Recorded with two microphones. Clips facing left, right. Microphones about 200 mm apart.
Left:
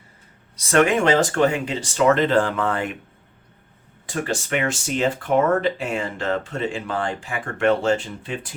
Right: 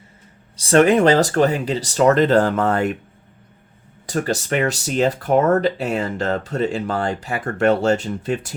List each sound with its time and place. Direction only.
0.5 s speech: 30° right (ahead or behind)
4.0 s speech: 40° right (ahead or behind)